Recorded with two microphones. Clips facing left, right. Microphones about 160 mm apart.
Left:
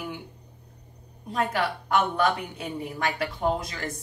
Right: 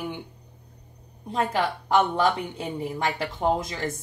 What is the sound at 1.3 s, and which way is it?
Speech, 25° right (ahead or behind).